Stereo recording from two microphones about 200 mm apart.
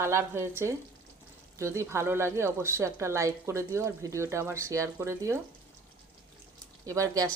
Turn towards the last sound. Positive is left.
turn(degrees=-15)  # may be behind; listen again after turning